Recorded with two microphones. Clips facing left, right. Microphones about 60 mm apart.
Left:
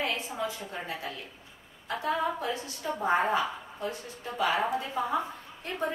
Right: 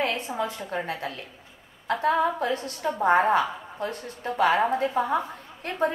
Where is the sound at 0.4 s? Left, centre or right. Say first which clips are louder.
Right 5 dB; right.